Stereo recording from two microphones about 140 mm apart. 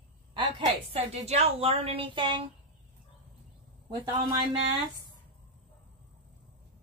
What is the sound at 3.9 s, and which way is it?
Speech, 35° right (ahead or behind).